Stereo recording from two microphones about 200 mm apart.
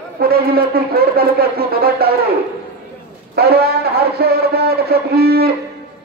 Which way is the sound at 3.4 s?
50° right (ahead or behind).